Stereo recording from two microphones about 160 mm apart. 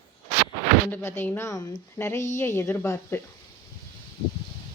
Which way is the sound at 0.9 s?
15° left (ahead or behind).